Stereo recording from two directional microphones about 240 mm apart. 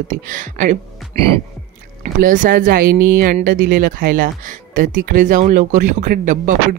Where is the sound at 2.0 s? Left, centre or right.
Right.